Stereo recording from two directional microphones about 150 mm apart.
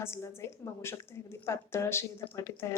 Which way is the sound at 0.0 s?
15° left (ahead or behind).